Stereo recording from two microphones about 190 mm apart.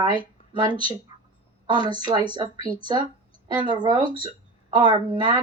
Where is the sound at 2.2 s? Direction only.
25° right (ahead or behind).